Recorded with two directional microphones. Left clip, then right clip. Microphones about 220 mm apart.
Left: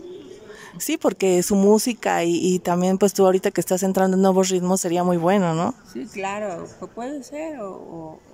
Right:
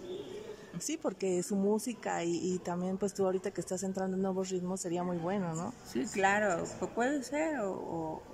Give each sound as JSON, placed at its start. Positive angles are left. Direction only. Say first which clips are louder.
{"t": 0.8, "sound": "speech", "louder": "left 14 dB", "side_deg": 40}
{"t": 5.9, "sound": "speech", "louder": "left 2 dB", "side_deg": 0}